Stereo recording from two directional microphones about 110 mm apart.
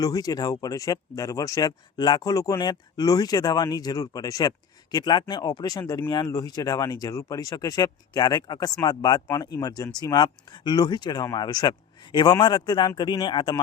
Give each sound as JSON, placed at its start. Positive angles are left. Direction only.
{"t": 0.0, "sound": "a man's voice", "side_deg": 35}